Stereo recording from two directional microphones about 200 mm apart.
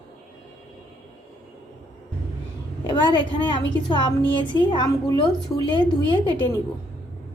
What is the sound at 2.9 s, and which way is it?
A woman's voice, 25° left (ahead or behind).